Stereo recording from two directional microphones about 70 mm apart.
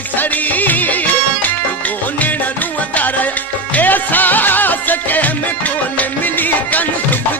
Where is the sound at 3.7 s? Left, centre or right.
Left.